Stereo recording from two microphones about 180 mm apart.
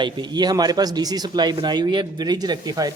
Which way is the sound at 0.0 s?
25° right (ahead or behind).